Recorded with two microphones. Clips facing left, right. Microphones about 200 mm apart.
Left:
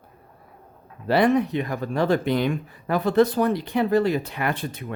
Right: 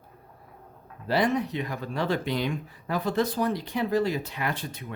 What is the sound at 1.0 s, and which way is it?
Speech, 60° left (ahead or behind).